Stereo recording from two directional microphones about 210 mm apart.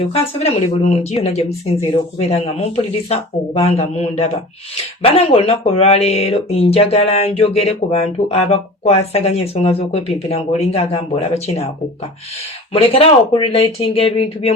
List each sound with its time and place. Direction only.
0.0 s speech: 30° left (ahead or behind)
12.7 s speech: 25° left (ahead or behind)